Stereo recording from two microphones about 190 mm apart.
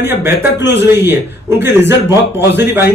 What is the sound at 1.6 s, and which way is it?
Speech, 65° left (ahead or behind).